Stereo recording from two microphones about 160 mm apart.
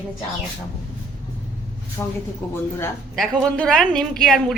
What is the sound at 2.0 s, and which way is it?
A woman's voice, 15° left (ahead or behind).